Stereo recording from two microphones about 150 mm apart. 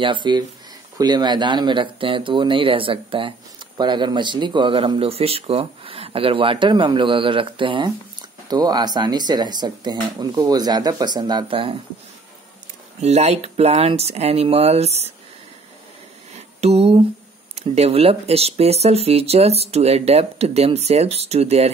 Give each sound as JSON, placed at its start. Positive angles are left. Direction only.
{"t": 0.0, "sound": "speech", "side_deg": -30}
{"t": 13.0, "sound": "speech", "side_deg": -45}
{"t": 16.3, "sound": "a sound", "side_deg": -45}
{"t": 17.6, "sound": "speech", "side_deg": -45}